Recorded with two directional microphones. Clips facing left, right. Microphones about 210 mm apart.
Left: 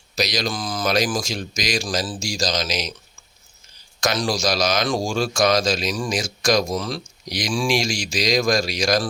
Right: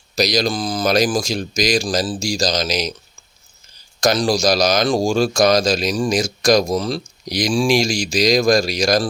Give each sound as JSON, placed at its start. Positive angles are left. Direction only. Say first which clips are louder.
{"t": 0.2, "sound": "a man's voice", "louder": "right 6 dB", "side_deg": -35}
{"t": 4.0, "sound": "a man's voice", "louder": "right 6 dB", "side_deg": -35}